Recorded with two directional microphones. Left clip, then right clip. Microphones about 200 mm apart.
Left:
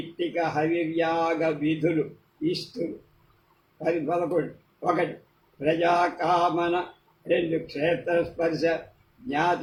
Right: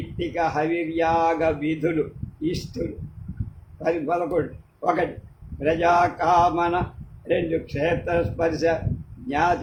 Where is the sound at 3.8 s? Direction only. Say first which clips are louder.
Right 2 dB; 15° right (ahead or behind).